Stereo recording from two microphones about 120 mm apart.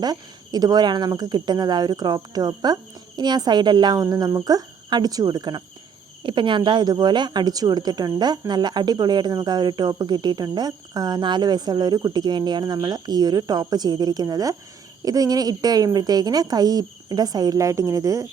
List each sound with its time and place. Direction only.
0.0 s speech: 35° right (ahead or behind)